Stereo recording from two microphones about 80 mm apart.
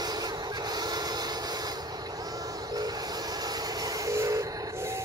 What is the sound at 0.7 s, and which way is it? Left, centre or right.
Printer, right.